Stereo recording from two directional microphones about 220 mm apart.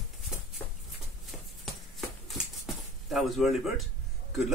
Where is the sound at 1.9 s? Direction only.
Centre (ahead or behind).